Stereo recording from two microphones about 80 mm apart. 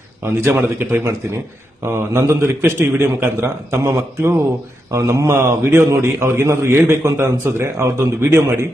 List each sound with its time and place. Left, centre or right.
0.3 s a man's voice: right